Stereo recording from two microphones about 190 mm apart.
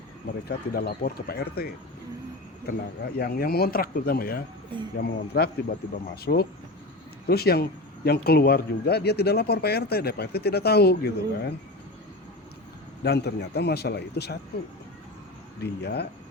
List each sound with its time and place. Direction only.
0.4 s speech: 55° left (ahead or behind)
13.0 s speech: 60° left (ahead or behind)
15.6 s speech: 60° left (ahead or behind)